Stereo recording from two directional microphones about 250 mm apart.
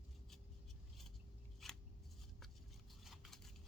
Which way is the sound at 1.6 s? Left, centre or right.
Centre.